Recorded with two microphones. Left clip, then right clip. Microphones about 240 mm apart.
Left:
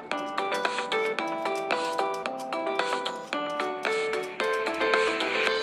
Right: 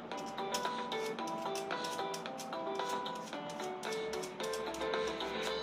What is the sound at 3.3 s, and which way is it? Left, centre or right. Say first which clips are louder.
Music: left 12 dB; left.